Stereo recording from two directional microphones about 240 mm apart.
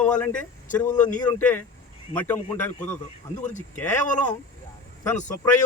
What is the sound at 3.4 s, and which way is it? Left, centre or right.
Speech, left.